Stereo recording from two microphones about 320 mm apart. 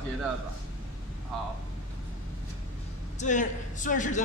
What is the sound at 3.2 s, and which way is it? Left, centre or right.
Speech, left.